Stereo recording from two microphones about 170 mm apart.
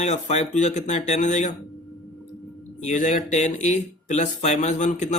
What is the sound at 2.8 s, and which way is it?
Speech, 45° left (ahead or behind).